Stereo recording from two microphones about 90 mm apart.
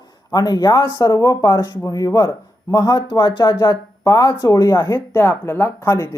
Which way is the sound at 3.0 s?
55° left (ahead or behind).